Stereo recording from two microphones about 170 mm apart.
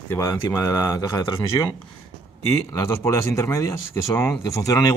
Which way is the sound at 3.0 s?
15° left (ahead or behind).